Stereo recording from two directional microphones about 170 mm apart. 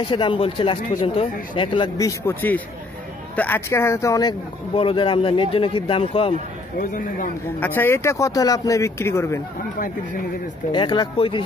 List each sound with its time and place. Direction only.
0.1 s a man's voice: 30° left (ahead or behind)
6.8 s a man's voice: 55° left (ahead or behind)
7.6 s speech: 15° left (ahead or behind)
10.7 s a man's voice: 25° left (ahead or behind)